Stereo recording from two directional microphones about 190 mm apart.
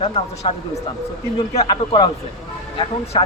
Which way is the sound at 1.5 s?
30° left (ahead or behind).